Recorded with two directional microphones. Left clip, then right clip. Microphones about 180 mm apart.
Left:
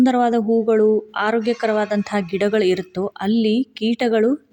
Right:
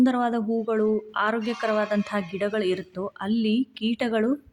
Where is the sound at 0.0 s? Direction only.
25° left (ahead or behind).